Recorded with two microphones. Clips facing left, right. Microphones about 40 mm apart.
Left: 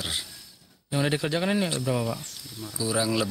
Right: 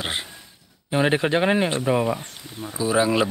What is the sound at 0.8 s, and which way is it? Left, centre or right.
Speech, right.